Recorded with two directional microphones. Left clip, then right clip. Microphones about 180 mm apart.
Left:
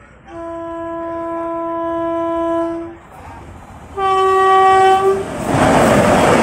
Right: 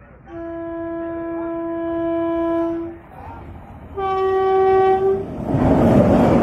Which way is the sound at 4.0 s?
10° left (ahead or behind).